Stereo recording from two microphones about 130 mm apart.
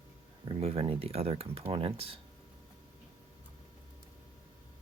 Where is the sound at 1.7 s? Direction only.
45° right (ahead or behind).